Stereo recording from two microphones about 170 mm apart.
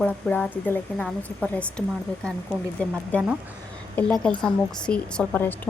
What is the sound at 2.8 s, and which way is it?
Speech, 10° left (ahead or behind).